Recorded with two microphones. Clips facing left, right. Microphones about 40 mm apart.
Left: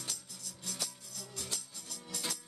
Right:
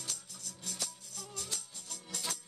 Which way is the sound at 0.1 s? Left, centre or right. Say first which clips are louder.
Even; right.